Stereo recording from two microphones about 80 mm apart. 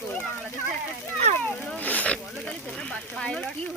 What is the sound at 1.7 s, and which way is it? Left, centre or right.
Speech, centre.